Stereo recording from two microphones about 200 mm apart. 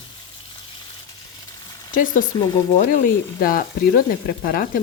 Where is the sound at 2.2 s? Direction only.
20° left (ahead or behind).